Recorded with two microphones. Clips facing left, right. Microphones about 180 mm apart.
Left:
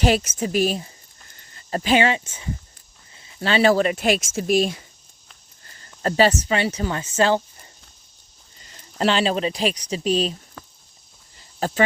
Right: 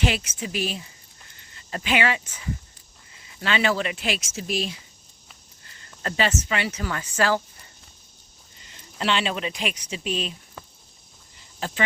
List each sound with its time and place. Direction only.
0.0 s speech: 40° left (ahead or behind)
5.6 s speech: 40° left (ahead or behind)
8.6 s speech: 40° left (ahead or behind)
11.6 s speech: 40° left (ahead or behind)